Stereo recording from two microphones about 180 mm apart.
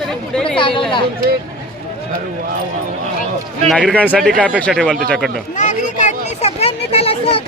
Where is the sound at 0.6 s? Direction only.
30° left (ahead or behind).